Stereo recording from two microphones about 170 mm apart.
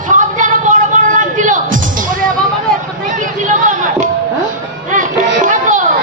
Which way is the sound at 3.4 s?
50° right (ahead or behind).